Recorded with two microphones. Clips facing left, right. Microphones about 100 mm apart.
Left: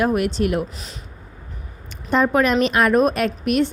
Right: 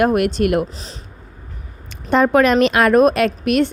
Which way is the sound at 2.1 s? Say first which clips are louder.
Right 4 dB; 75° right (ahead or behind).